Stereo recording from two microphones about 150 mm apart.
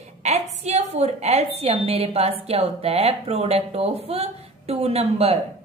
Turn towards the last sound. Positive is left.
turn(degrees=-40)  # may be behind; listen again after turning